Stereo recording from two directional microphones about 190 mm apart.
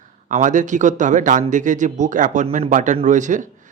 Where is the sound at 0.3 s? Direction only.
40° right (ahead or behind).